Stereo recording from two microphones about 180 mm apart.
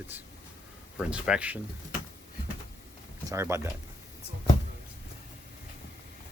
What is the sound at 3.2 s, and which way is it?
Speech, 15° right (ahead or behind).